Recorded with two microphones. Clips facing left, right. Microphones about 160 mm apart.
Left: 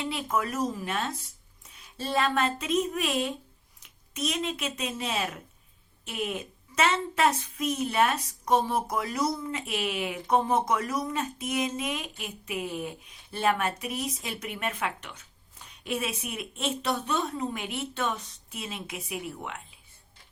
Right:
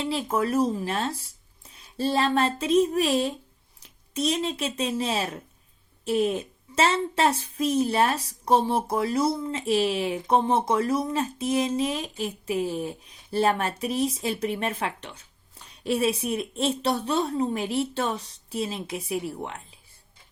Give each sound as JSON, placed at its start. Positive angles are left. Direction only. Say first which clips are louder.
{"t": 0.0, "sound": "a child's voice", "louder": "right 4 dB", "side_deg": -30}